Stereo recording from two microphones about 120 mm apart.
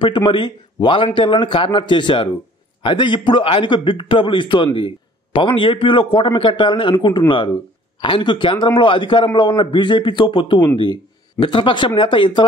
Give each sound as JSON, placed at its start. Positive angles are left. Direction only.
{"t": 0.0, "sound": "a man's voice", "side_deg": 45}